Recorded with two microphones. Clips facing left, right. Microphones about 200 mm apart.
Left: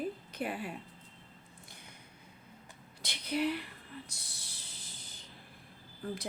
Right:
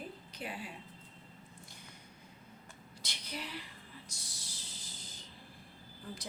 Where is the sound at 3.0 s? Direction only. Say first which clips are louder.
Left 12 dB; 60° left (ahead or behind).